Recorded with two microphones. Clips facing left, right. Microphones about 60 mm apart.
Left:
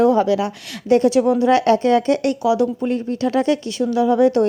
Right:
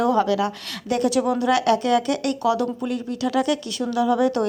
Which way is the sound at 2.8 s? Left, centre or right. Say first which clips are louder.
Left 5 dB; left.